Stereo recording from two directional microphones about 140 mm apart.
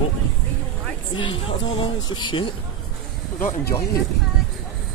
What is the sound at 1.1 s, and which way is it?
Speech, 40° left (ahead or behind).